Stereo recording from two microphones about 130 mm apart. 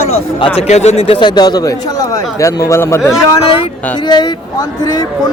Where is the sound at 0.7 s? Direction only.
55° left (ahead or behind); by 3.1 s 20° left (ahead or behind).